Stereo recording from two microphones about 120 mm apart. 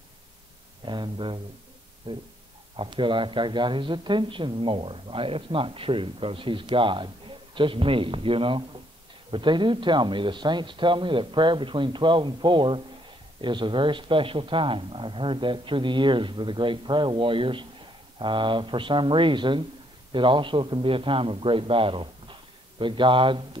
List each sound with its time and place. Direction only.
0.8 s a man's voice: 40° right (ahead or behind)